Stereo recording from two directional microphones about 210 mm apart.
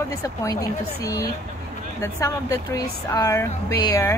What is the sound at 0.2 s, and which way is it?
Speech, 15° left (ahead or behind).